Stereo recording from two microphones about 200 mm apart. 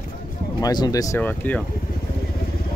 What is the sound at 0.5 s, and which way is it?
Speech, 20° left (ahead or behind).